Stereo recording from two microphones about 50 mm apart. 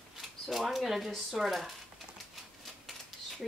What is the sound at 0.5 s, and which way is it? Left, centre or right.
Speech, centre.